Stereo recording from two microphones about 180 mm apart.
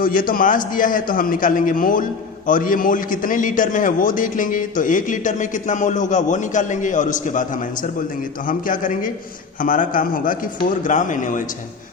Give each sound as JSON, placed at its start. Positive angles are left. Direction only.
{"t": 0.0, "sound": "a man's voice", "side_deg": 50}